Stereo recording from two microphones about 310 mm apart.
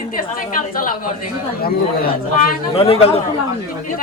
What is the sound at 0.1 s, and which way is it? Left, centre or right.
A woman's voice, left.